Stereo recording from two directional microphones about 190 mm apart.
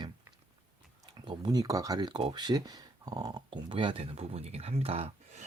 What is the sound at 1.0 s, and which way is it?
Speech, 25° right (ahead or behind).